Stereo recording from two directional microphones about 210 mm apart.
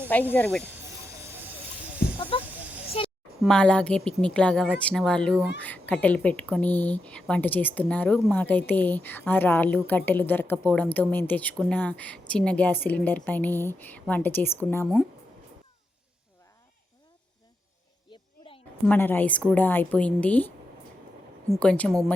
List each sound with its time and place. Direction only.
0.3 s speech: 10° left (ahead or behind)
1.2 s a sound: 10° right (ahead or behind)
3.4 s a woman's voice: 5° left (ahead or behind)
18.1 s a sound: 25° left (ahead or behind)
18.9 s speech: 10° left (ahead or behind)
21.5 s a woman's voice: 5° left (ahead or behind)